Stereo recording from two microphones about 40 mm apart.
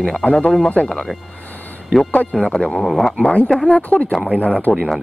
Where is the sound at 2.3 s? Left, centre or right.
Centre.